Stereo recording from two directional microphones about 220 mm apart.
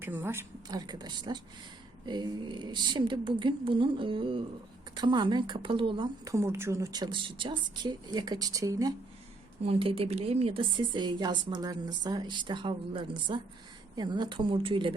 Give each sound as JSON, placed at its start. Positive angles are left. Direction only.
{"t": 0.0, "sound": "speech", "side_deg": -10}
{"t": 9.6, "sound": "speech", "side_deg": -25}